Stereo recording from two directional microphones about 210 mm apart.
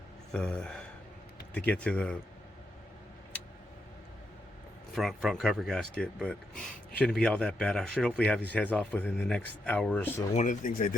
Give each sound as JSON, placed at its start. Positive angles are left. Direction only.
{"t": 0.3, "sound": "speech", "side_deg": 5}
{"t": 4.9, "sound": "speech", "side_deg": 0}
{"t": 10.3, "sound": "speech", "side_deg": 35}